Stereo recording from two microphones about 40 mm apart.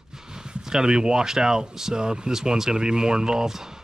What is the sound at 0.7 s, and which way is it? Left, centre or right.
Speech, centre.